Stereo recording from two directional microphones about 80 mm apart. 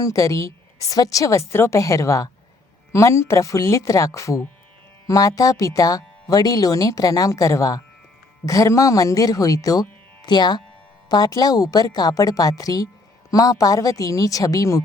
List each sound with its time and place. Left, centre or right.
0.0 s speech: left
10.2 s speech: left
11.1 s speech: left